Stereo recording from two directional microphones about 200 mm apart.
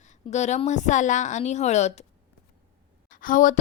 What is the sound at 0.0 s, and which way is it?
Speech, 35° left (ahead or behind).